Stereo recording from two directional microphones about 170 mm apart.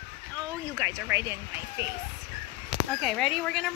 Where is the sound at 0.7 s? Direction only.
15° right (ahead or behind).